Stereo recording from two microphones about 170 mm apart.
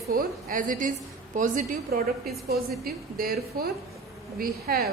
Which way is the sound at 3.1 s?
60° right (ahead or behind).